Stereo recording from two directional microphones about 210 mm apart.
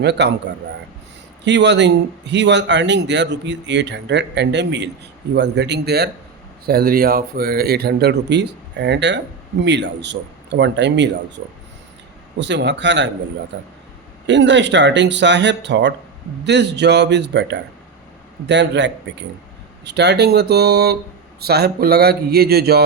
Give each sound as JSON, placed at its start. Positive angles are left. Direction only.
{"t": 0.0, "sound": "speech", "side_deg": -55}
{"t": 12.4, "sound": "speech", "side_deg": -55}